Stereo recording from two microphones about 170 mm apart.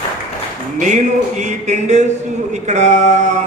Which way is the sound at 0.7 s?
45° right (ahead or behind).